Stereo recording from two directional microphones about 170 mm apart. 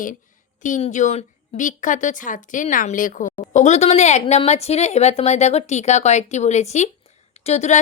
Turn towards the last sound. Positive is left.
turn(degrees=40)  # may be behind; listen again after turning